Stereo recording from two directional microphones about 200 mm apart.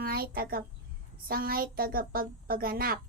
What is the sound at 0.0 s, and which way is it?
A child's voice, 50° right (ahead or behind).